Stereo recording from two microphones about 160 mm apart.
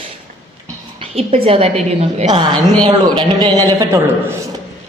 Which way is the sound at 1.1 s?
35° right (ahead or behind).